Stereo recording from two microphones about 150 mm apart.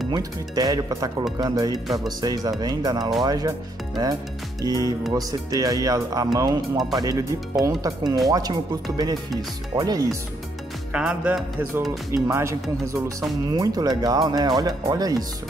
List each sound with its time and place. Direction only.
0.1 s speech: 25° right (ahead or behind)
10.9 s music: 5° right (ahead or behind)
12.3 s speech: 20° right (ahead or behind)